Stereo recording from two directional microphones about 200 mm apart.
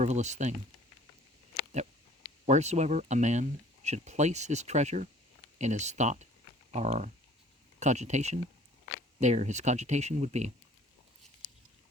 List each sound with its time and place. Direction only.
0.0 s speech: 35° right (ahead or behind)
2.5 s speech: 35° right (ahead or behind)